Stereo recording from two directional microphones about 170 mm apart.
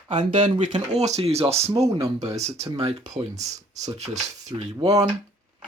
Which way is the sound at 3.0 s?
25° right (ahead or behind).